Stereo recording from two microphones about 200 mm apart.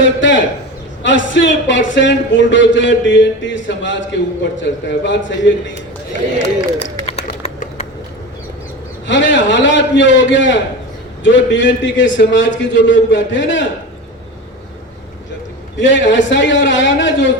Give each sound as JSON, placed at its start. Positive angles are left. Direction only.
{"t": 0.0, "sound": "a man's voice", "side_deg": 65}
{"t": 7.0, "sound": "bird", "side_deg": 30}
{"t": 9.0, "sound": "speech", "side_deg": 65}
{"t": 15.8, "sound": "speech", "side_deg": 65}